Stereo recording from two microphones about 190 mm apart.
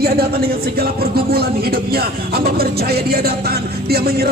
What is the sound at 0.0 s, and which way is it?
Speech, 55° right (ahead or behind).